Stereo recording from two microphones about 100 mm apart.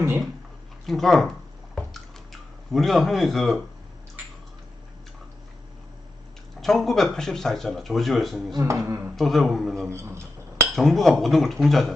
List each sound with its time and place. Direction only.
0.9 s speech: centre (ahead or behind)
1.7 s drip: centre (ahead or behind)
6.6 s speech: centre (ahead or behind)
8.5 s beatboxing: 30° right (ahead or behind)
9.1 s speech: centre (ahead or behind)
9.9 s beatboxing: 30° right (ahead or behind)
10.8 s speech: centre (ahead or behind)